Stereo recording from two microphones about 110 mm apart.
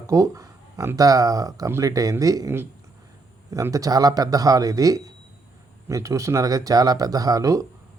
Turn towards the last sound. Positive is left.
turn(degrees=-30)  # may be behind; listen again after turning